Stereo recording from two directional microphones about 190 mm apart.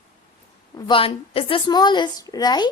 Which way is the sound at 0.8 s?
25° left (ahead or behind).